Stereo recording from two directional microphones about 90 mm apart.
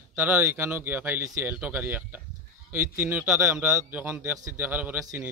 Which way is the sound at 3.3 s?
10° right (ahead or behind).